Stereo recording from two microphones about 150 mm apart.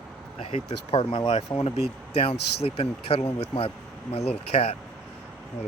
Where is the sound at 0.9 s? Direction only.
35° left (ahead or behind).